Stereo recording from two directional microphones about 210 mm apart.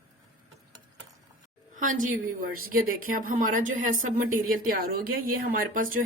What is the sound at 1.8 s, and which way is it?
A woman's voice, 40° right (ahead or behind).